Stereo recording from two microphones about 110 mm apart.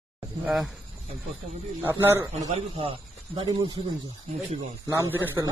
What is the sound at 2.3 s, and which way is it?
Speech, 90° right.